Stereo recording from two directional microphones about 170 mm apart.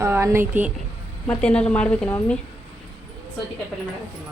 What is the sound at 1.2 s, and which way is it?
A woman's voice, 5° left (ahead or behind).